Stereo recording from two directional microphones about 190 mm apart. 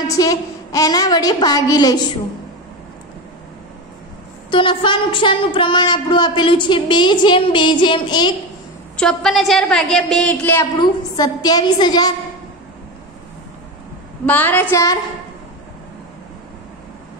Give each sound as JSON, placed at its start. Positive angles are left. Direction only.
{"t": 0.1, "sound": "a woman's voice", "side_deg": 20}
{"t": 4.5, "sound": "a woman's voice", "side_deg": 25}
{"t": 8.9, "sound": "a woman's voice", "side_deg": 5}
{"t": 10.8, "sound": "a woman's voice", "side_deg": 20}
{"t": 14.2, "sound": "a woman's voice", "side_deg": 10}